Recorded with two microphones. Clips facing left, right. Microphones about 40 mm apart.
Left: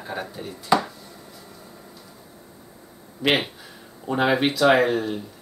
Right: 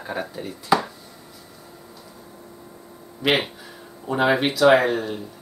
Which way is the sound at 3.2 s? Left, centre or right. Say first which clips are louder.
Right 1 dB; centre.